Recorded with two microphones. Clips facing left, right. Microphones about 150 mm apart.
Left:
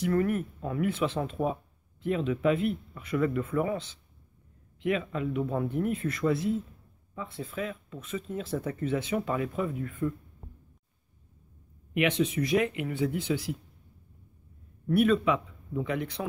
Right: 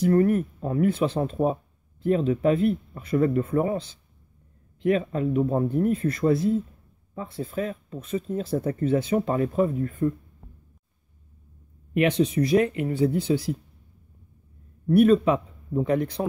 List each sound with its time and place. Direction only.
0.0 s speech: 40° right (ahead or behind)
11.9 s speech: 40° right (ahead or behind)
14.9 s speech: 40° right (ahead or behind)